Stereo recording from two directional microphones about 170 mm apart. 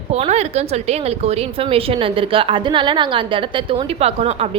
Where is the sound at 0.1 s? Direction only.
40° right (ahead or behind).